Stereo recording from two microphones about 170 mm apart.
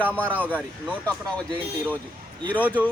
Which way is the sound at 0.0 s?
10° left (ahead or behind).